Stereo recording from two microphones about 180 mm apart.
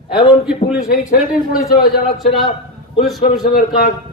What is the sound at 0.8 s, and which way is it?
A man's voice, 50° left (ahead or behind).